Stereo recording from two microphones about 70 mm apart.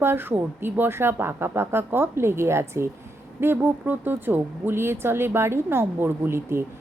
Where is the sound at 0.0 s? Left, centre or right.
Right.